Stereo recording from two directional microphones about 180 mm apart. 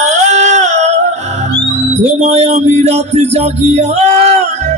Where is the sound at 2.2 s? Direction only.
35° right (ahead or behind).